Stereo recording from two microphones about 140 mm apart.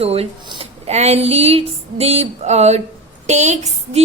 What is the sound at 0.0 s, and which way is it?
A woman's voice, 45° right (ahead or behind).